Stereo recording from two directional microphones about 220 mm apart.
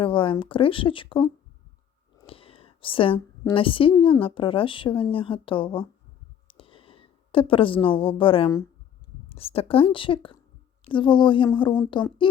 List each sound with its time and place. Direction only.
0.0 s a woman's voice: 25° left (ahead or behind)
6.5 s a sound: 25° left (ahead or behind)
9.3 s speech: 25° left (ahead or behind)